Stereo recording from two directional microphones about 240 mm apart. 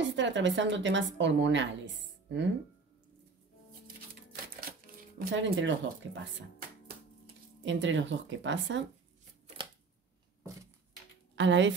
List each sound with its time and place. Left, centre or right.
0.0 s a woman's voice: right
3.8 s a sound: right
5.3 s a woman's voice: right
7.6 s a woman's voice: right
11.3 s a woman's voice: right